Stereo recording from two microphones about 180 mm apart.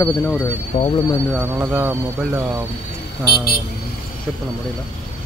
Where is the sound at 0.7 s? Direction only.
45° left (ahead or behind).